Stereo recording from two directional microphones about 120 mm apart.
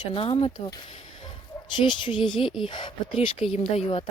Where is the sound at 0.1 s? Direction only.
45° left (ahead or behind).